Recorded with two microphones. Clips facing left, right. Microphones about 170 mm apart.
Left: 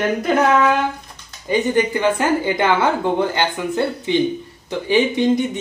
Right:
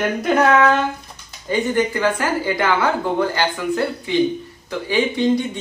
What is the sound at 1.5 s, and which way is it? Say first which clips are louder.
A woman's voice: left 2 dB; 20° left (ahead or behind).